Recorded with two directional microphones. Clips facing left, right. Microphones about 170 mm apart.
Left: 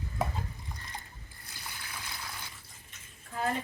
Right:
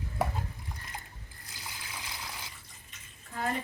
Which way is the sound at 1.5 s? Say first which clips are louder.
Even; 15° right (ahead or behind).